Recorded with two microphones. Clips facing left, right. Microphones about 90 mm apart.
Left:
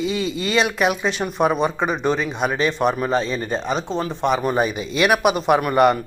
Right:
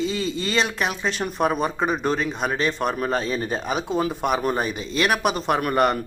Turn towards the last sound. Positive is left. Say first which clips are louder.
# left 4 dB
turn(degrees=0)  # may be behind; listen again after turning